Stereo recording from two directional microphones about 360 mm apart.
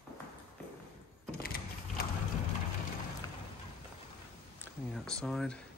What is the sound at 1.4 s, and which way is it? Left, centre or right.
Mechanisms, left.